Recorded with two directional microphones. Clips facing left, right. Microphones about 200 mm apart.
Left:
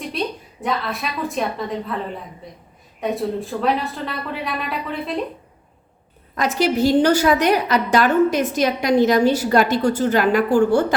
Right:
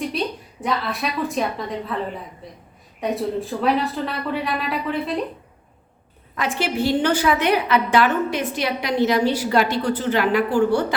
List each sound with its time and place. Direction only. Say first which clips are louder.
0.6 s a woman's voice: even; centre (ahead or behind)
3.0 s a woman's voice: left 1 dB; centre (ahead or behind)
6.3 s a woman's voice: left 4 dB; 40° left (ahead or behind)